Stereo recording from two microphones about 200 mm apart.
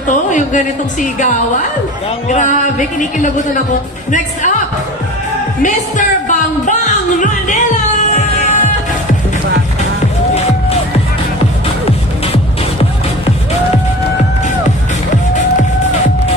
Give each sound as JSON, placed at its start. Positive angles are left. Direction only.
{"t": 0.3, "sound": "speech", "side_deg": 40}
{"t": 2.2, "sound": "speech", "side_deg": 40}
{"t": 4.1, "sound": "speech", "side_deg": 40}
{"t": 5.6, "sound": "music", "side_deg": 40}
{"t": 11.8, "sound": "music", "side_deg": 30}